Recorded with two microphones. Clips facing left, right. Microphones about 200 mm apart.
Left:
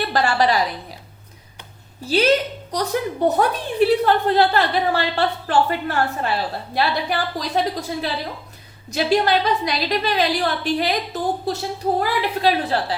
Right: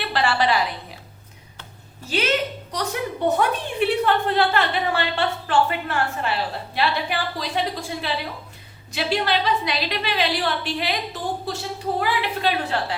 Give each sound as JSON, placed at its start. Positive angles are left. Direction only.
{"t": 0.0, "sound": "a woman's voice", "side_deg": 40}
{"t": 2.0, "sound": "a woman's voice", "side_deg": 35}